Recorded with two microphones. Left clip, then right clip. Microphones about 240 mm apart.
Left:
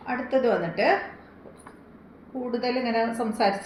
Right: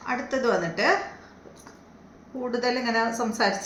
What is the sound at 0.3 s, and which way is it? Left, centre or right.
Speech, centre.